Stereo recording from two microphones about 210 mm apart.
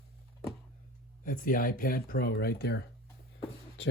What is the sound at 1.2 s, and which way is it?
Speech, 40° left (ahead or behind).